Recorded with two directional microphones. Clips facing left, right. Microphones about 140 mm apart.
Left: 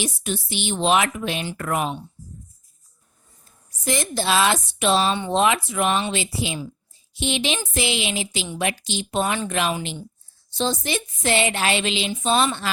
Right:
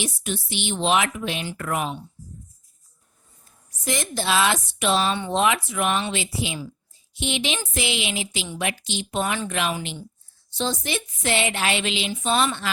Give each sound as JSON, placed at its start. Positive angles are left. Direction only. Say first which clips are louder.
{"t": 0.0, "sound": "speech", "louder": "left 2 dB", "side_deg": 40}
{"t": 3.8, "sound": "speech", "louder": "left 2 dB", "side_deg": 35}